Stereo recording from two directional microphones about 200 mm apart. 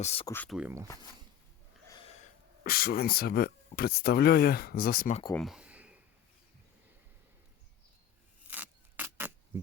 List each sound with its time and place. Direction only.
0.0 s speech: 30° left (ahead or behind)
0.3 s speech: 10° left (ahead or behind)
0.5 s speech: 10° right (ahead or behind)
1.9 s speech: 25° left (ahead or behind); by 5.1 s 45° left (ahead or behind)
5.3 s a sound: centre (ahead or behind)
8.4 s scissors: 10° right (ahead or behind)